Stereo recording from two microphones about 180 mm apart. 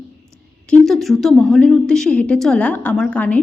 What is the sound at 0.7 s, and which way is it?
A woman's voice, centre (ahead or behind).